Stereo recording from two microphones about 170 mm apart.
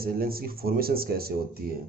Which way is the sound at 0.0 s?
60° right (ahead or behind).